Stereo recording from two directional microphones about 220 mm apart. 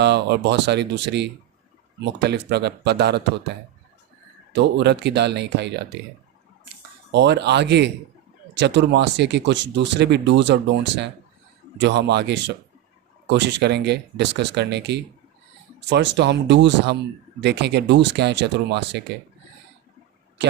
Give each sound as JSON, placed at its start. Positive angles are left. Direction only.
{"t": 0.0, "sound": "speech", "side_deg": -50}
{"t": 4.5, "sound": "speech", "side_deg": -50}
{"t": 7.1, "sound": "speech", "side_deg": -50}